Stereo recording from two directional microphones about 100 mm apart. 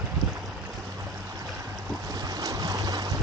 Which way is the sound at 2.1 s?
40° right (ahead or behind).